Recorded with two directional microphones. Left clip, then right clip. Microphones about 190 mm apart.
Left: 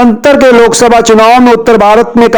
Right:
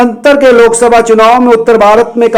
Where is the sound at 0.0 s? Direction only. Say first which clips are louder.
Left 1 dB; 30° left (ahead or behind).